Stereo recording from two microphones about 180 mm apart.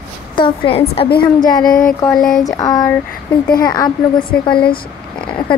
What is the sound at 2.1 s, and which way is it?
Speech, centre (ahead or behind).